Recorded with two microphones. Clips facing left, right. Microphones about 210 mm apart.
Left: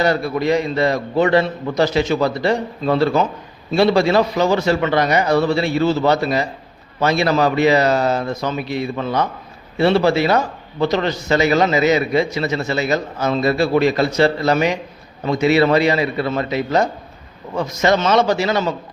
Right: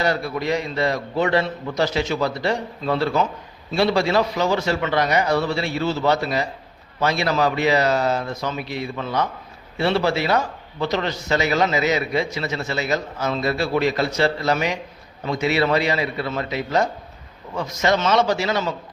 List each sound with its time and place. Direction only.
0.0 s a man's voice: 50° left (ahead or behind)
9.8 s a man's voice: 50° left (ahead or behind)